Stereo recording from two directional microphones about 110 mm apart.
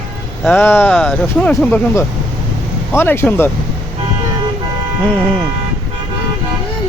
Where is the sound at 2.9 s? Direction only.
20° left (ahead or behind).